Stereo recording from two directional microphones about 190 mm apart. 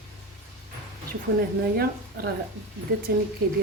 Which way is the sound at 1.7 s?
55° right (ahead or behind).